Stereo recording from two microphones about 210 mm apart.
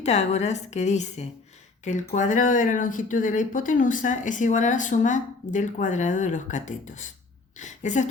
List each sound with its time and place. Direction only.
0.0 s a woman's voice: 30° left (ahead or behind)